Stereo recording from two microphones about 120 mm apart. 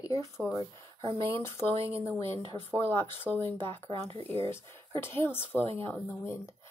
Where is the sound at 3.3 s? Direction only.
Centre (ahead or behind).